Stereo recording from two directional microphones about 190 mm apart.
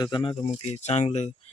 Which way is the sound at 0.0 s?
25° left (ahead or behind).